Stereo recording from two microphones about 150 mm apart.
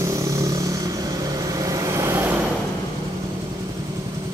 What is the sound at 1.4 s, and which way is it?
Vehicle, 25° right (ahead or behind).